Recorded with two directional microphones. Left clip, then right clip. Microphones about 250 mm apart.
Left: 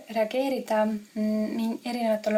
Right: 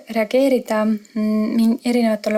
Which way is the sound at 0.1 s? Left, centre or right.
Right.